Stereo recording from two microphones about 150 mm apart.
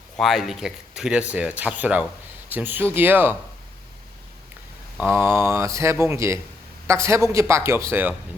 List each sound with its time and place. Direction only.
0.2 s speech: centre (ahead or behind)
4.9 s speech: 15° right (ahead or behind)